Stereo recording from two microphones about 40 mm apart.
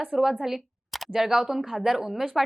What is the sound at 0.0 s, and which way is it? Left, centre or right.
A woman's voice, centre.